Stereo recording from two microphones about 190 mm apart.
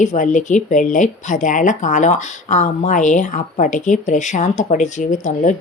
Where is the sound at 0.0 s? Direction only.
40° left (ahead or behind).